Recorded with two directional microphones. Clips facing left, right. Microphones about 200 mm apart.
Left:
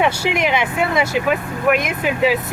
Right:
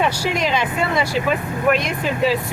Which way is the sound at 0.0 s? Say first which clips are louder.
Left 2 dB; 20° left (ahead or behind).